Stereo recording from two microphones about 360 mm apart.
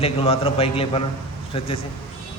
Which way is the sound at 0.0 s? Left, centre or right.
Centre.